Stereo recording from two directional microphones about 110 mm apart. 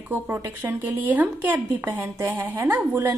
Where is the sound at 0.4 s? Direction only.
25° right (ahead or behind).